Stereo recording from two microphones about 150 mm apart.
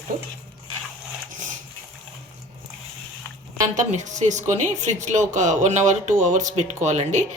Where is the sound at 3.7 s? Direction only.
55° right (ahead or behind).